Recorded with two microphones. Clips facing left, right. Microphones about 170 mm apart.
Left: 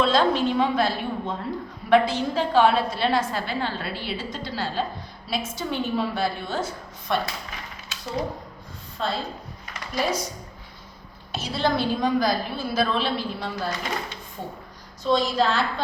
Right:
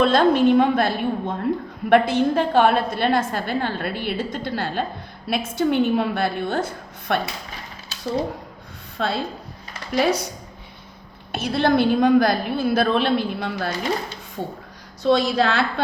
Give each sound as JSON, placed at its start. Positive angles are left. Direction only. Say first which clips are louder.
{"t": 0.0, "sound": "a woman's voice", "louder": "right 5 dB", "side_deg": -55}
{"t": 7.9, "sound": "a sound", "louder": "even", "side_deg": -30}
{"t": 9.0, "sound": "a woman's voice", "louder": "right 3 dB", "side_deg": -70}
{"t": 9.7, "sound": "a sound", "louder": "right 8 dB", "side_deg": -30}
{"t": 10.0, "sound": "a woman's voice", "louder": "right 5 dB", "side_deg": -70}
{"t": 15.0, "sound": "a woman's voice", "louder": "right 3 dB", "side_deg": -70}